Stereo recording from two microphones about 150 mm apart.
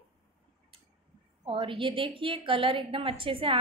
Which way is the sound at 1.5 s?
35° right (ahead or behind).